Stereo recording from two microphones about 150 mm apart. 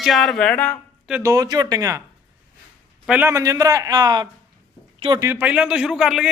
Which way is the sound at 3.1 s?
15° right (ahead or behind).